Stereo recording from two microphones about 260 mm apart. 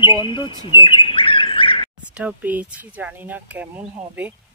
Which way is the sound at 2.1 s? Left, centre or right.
Centre.